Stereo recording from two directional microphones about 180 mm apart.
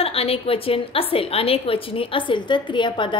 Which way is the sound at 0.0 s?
35° left (ahead or behind).